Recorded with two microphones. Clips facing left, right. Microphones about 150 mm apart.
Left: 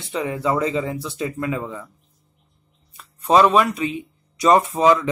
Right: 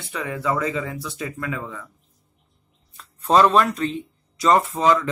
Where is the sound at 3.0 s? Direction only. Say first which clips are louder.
Left 1 dB; 10° left (ahead or behind).